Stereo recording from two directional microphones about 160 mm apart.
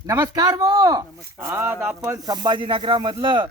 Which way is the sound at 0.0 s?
20° right (ahead or behind).